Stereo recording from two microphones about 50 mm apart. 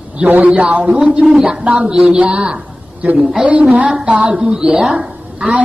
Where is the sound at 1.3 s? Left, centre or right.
Centre.